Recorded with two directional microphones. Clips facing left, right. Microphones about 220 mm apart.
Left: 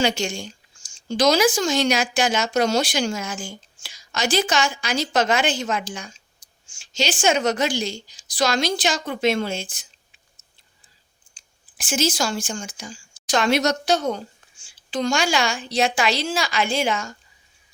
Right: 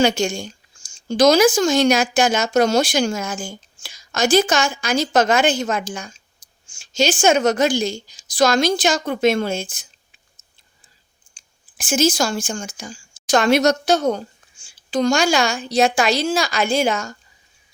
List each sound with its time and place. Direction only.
0.0 s speech: 45° right (ahead or behind)
11.3 s speech: 45° right (ahead or behind)